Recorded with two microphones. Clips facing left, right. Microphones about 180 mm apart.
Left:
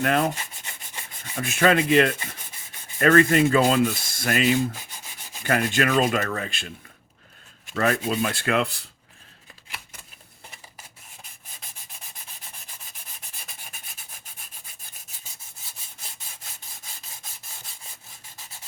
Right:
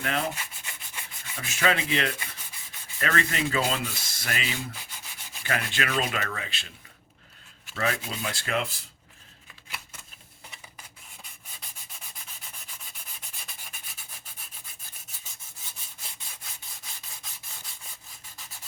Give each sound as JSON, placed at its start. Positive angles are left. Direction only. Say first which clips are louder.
{"t": 0.0, "sound": "speech", "louder": "left 7 dB", "side_deg": 55}
{"t": 7.7, "sound": "speech", "louder": "left 7 dB", "side_deg": 50}